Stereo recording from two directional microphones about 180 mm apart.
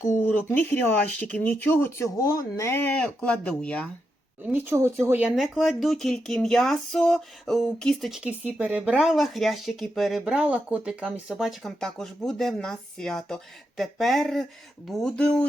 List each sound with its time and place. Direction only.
0.0 s speech: 15° left (ahead or behind)
4.4 s speech: 10° right (ahead or behind); by 15.4 s 5° left (ahead or behind)